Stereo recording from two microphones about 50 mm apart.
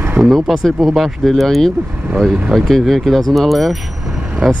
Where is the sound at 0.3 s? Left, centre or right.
Centre.